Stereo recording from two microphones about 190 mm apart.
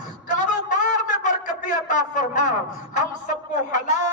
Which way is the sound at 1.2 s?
45° left (ahead or behind).